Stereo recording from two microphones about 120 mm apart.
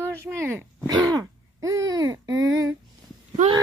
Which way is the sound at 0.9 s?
30° right (ahead or behind).